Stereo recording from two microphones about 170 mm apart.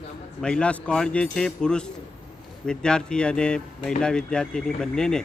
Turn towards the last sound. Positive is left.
turn(degrees=5)  # may be behind; listen again after turning